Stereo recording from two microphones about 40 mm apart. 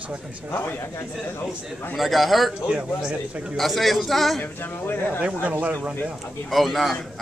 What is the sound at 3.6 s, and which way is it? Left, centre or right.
Speech, centre.